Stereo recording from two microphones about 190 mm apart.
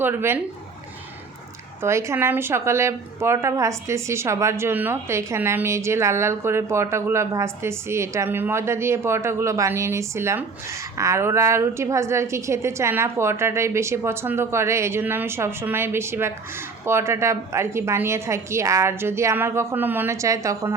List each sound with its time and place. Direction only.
0.0 s a woman's voice: 10° right (ahead or behind)
1.8 s a woman's voice: 15° right (ahead or behind)